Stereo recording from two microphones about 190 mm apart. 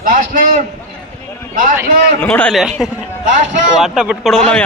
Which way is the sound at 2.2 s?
5° left (ahead or behind).